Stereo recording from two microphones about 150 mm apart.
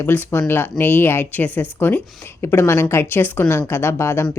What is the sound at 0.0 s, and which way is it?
Speech, 15° left (ahead or behind).